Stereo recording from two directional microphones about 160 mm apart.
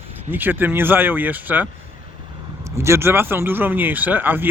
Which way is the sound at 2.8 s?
15° right (ahead or behind).